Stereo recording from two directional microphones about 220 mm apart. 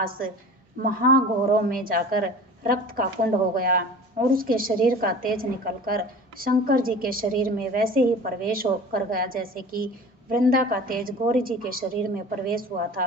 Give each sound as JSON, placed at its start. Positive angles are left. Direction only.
{"t": 0.0, "sound": "a woman's voice", "side_deg": -40}